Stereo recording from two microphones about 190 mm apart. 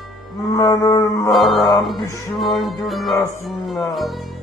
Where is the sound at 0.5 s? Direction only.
20° left (ahead or behind).